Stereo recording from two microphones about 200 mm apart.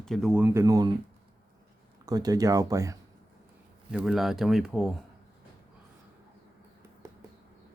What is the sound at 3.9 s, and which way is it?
Speech, centre (ahead or behind).